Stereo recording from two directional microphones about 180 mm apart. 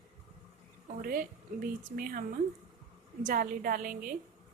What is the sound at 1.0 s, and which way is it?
A woman's voice, 55° right (ahead or behind).